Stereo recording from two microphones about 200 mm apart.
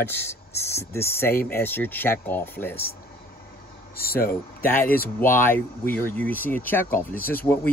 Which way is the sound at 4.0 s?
50° left (ahead or behind).